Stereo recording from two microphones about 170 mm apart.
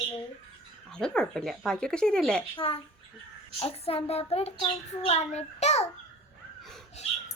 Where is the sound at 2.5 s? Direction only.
35° left (ahead or behind).